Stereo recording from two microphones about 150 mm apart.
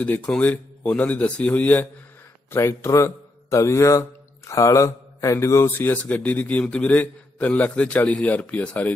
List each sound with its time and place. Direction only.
0.0 s speech: 10° left (ahead or behind)